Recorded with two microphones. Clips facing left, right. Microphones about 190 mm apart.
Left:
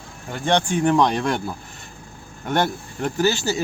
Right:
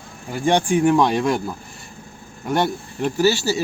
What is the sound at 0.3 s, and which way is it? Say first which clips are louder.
Speech: right 3 dB; 10° right (ahead or behind).